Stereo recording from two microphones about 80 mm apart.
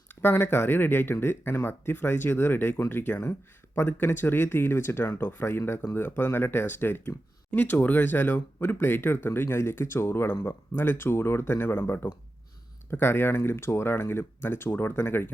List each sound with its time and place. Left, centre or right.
0.1 s speech: left